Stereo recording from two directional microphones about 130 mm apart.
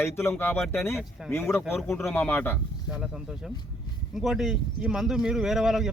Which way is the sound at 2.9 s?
5° right (ahead or behind).